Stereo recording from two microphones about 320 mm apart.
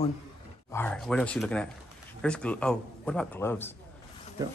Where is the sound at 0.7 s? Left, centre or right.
Centre.